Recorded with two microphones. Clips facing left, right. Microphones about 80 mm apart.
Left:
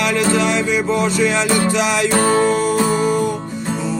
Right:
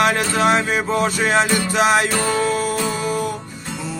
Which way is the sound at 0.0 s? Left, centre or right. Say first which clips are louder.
Even; right.